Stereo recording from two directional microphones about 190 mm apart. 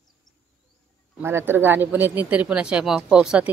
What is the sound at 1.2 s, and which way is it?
Speech, 10° right (ahead or behind).